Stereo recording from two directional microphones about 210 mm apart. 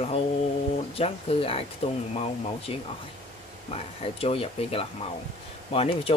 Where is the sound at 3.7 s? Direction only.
30° left (ahead or behind).